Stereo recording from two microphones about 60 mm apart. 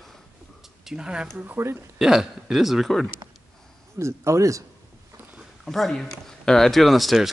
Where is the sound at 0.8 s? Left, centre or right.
Centre.